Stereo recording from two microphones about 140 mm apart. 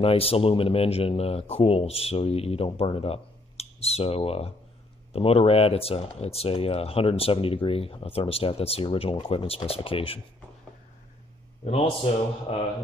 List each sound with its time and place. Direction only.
0.0 s speech: 45° left (ahead or behind)
11.6 s a man's voice: 45° left (ahead or behind)